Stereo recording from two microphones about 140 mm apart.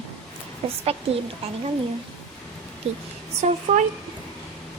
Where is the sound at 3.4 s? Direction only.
50° right (ahead or behind).